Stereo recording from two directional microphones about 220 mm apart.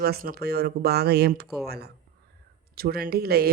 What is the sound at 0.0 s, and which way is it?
Speech, 45° right (ahead or behind).